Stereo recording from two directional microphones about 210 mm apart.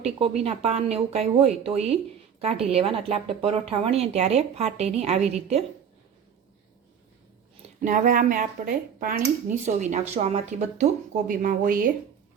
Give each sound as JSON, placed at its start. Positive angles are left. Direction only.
{"t": 0.0, "sound": "speech", "side_deg": -30}
{"t": 7.8, "sound": "speech", "side_deg": -40}